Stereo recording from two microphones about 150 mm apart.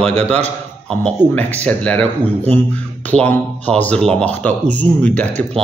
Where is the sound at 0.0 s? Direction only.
50° right (ahead or behind).